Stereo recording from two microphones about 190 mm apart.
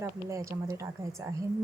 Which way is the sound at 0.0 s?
15° right (ahead or behind).